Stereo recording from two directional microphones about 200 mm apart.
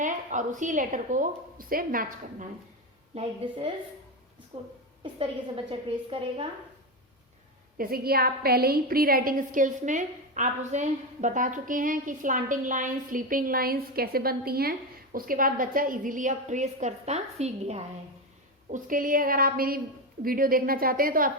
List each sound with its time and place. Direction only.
0.0 s a woman's voice: 40° right (ahead or behind)
4.5 s a woman's voice: 25° right (ahead or behind)
6.1 s a woman's voice: 25° right (ahead or behind)
7.8 s a woman's voice: 45° right (ahead or behind); by 17.8 s 30° right (ahead or behind)
18.7 s a woman's voice: 45° right (ahead or behind)